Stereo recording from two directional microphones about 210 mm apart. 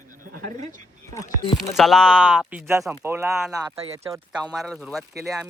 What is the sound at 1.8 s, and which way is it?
Speech, centre (ahead or behind).